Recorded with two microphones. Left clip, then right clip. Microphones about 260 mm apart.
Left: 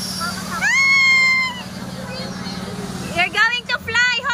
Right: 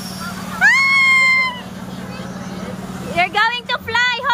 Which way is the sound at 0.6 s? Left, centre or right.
Centre.